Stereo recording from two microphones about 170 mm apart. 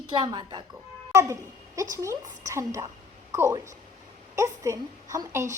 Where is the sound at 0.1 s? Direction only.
25° right (ahead or behind).